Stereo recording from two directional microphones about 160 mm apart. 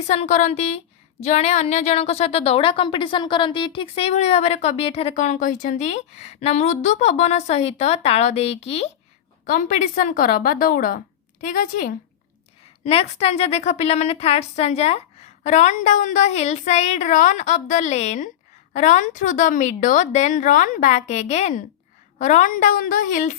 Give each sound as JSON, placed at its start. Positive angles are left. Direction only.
{"t": 0.1, "sound": "a woman's voice", "side_deg": 45}
{"t": 9.5, "sound": "a woman's voice", "side_deg": 55}
{"t": 12.8, "sound": "a woman's voice", "side_deg": 40}